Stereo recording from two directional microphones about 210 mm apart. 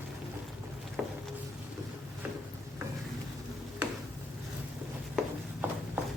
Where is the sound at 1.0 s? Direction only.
5° right (ahead or behind).